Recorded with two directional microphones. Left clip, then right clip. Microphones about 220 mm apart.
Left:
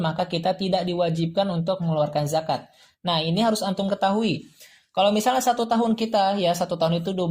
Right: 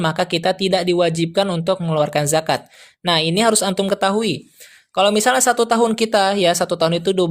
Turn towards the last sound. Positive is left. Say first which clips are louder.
# right 7 dB
turn(degrees=-35)  # may be behind; listen again after turning